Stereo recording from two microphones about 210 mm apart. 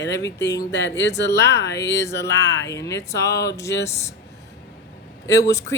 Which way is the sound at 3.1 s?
55° left (ahead or behind).